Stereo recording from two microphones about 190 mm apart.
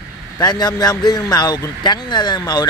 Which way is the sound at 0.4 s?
20° left (ahead or behind).